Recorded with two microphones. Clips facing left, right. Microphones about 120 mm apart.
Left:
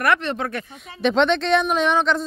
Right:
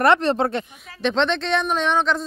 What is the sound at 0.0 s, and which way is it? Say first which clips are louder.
Speech: right 4 dB; 30° right (ahead or behind).